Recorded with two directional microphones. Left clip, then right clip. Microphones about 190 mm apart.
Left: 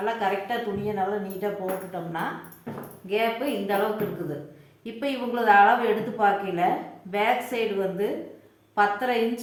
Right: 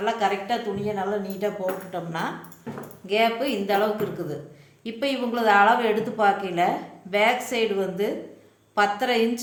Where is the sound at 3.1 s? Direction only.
55° right (ahead or behind).